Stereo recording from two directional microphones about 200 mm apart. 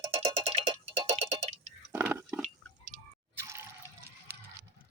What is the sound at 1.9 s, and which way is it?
Drip, 10° right (ahead or behind).